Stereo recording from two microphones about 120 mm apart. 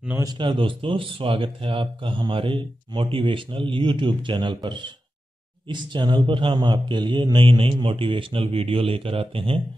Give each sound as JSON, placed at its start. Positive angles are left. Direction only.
{"t": 0.2, "sound": "speech", "side_deg": -40}